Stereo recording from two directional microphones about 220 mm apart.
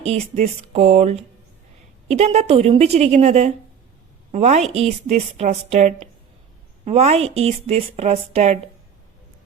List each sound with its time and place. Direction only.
0.0 s a woman's voice: 30° right (ahead or behind)